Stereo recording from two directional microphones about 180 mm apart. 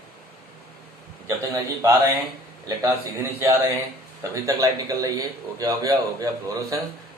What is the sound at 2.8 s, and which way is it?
A man's voice, 15° right (ahead or behind).